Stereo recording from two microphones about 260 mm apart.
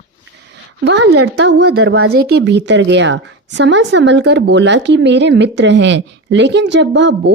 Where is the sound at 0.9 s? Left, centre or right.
Right.